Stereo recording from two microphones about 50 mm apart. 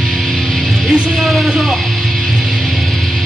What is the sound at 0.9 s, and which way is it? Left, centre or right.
Music, centre.